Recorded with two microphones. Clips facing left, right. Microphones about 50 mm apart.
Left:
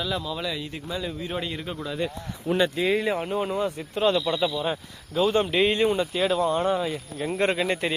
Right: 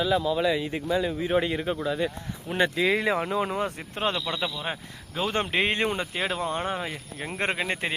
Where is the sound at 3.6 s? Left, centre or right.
Right.